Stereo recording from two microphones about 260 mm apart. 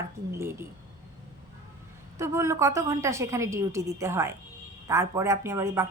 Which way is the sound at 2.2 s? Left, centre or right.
Centre.